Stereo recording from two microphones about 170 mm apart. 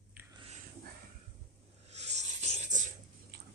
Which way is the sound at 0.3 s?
30° right (ahead or behind).